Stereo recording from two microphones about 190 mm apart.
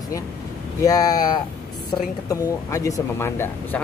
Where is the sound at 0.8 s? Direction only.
20° left (ahead or behind).